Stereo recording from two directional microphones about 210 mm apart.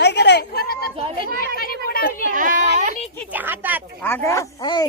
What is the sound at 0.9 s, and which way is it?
Speech, 25° right (ahead or behind).